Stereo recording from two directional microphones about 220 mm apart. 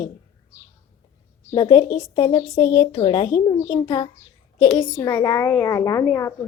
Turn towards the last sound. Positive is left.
turn(degrees=15)  # may be behind; listen again after turning